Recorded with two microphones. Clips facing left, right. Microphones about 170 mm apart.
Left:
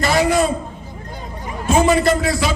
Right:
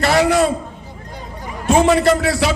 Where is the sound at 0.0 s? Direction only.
70° right (ahead or behind).